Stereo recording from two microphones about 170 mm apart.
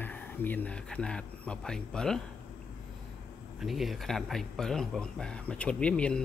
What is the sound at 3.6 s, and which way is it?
Speech, centre (ahead or behind).